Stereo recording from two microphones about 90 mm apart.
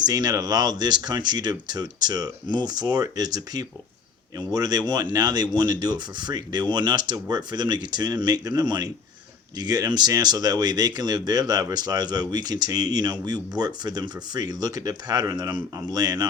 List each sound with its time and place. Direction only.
0.0 s speech: 45° right (ahead or behind)